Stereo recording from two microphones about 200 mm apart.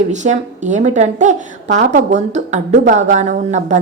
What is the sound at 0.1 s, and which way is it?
Speech, 35° right (ahead or behind).